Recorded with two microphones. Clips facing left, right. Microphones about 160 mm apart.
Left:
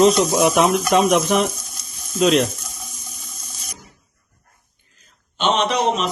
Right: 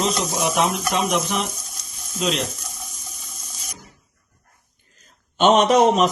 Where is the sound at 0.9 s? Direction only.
55° left (ahead or behind).